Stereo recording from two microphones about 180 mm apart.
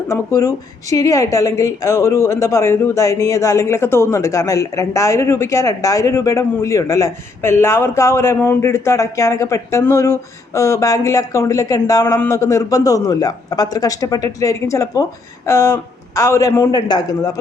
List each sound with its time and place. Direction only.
0.1 s a woman's voice: 20° left (ahead or behind)